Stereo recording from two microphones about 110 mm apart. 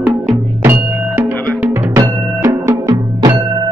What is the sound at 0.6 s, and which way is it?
Music, 20° right (ahead or behind).